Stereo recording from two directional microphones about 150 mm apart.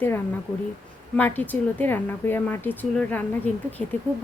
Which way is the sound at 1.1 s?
10° left (ahead or behind).